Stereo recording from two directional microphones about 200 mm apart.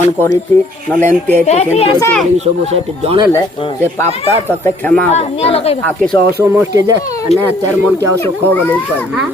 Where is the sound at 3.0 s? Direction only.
30° right (ahead or behind).